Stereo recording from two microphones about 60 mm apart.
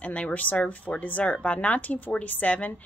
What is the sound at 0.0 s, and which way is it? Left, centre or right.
Speech, left.